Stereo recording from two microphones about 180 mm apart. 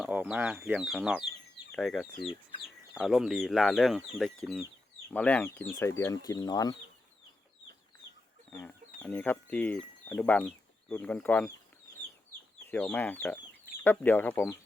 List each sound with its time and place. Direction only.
0.0 s speech: 5° right (ahead or behind); by 6.7 s 20° left (ahead or behind)
8.4 s speech: 10° left (ahead or behind)
12.6 s speech: 10° left (ahead or behind)